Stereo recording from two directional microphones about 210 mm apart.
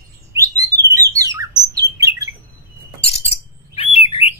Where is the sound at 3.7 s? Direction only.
30° left (ahead or behind).